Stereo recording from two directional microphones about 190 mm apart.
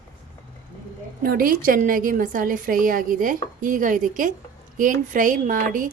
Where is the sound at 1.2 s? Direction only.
50° right (ahead or behind).